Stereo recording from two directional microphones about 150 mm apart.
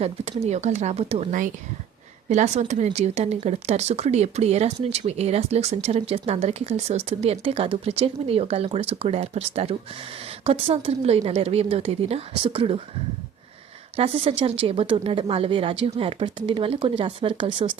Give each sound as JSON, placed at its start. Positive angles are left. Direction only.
{"t": 0.0, "sound": "speech", "side_deg": -45}
{"t": 2.3, "sound": "a woman's voice", "side_deg": -50}
{"t": 13.9, "sound": "a woman's voice", "side_deg": -40}